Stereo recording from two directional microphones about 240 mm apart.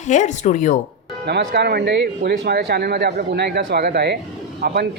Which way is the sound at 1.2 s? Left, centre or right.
Right.